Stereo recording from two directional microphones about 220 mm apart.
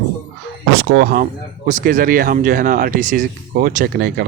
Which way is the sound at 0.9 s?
40° right (ahead or behind).